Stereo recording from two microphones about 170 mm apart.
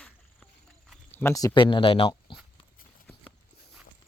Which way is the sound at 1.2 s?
15° left (ahead or behind).